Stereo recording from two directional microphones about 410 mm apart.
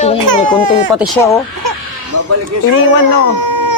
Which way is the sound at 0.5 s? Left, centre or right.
Centre.